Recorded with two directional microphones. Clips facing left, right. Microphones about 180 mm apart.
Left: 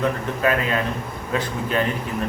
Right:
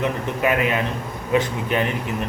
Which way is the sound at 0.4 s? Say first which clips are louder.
Right 1 dB; 15° right (ahead or behind).